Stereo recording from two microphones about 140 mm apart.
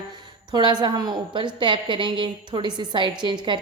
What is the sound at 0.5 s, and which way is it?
A woman's voice, 30° right (ahead or behind).